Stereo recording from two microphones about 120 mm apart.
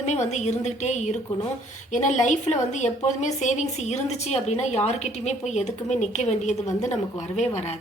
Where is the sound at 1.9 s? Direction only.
85° left.